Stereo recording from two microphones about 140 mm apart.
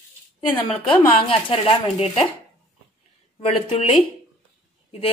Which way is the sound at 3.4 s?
45° left (ahead or behind).